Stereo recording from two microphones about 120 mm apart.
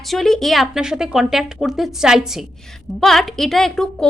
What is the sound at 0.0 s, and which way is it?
A woman's voice, centre (ahead or behind).